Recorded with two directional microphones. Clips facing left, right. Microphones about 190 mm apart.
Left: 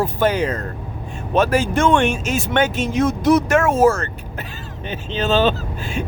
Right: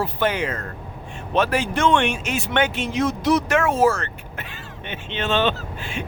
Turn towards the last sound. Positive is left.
turn(degrees=40)  # may be behind; listen again after turning